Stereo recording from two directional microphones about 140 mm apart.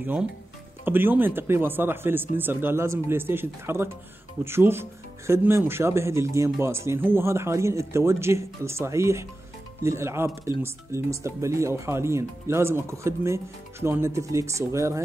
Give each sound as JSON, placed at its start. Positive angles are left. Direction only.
{"t": 0.0, "sound": "speech", "side_deg": -10}